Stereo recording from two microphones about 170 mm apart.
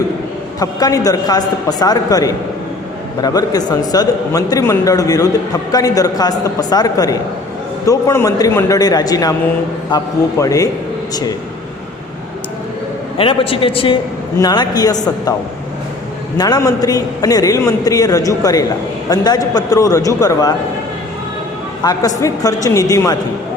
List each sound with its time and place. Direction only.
0.6 s a man's voice: 20° left (ahead or behind)
13.1 s a man's voice: 30° left (ahead or behind)
16.4 s a man's voice: 20° left (ahead or behind)
21.8 s a man's voice: 20° left (ahead or behind)